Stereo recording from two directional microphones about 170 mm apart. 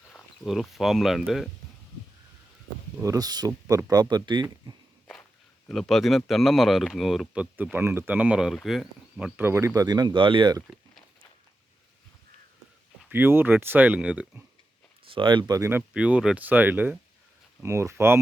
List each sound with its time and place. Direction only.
0.1 s speech: 5° left (ahead or behind)
3.0 s speech: 20° right (ahead or behind)
5.6 s speech: centre (ahead or behind); by 10.6 s 30° right (ahead or behind)
13.1 s speech: 10° right (ahead or behind)
15.1 s speech: 30° right (ahead or behind)
15.9 s speech: 5° right (ahead or behind)